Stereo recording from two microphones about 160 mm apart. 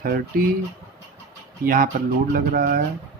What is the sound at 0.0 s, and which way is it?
Speech, 70° right (ahead or behind).